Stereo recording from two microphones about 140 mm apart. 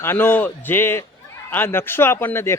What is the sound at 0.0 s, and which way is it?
A man's voice, 15° left (ahead or behind).